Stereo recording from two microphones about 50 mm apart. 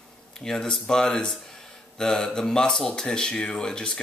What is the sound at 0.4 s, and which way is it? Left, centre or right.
Speech, centre.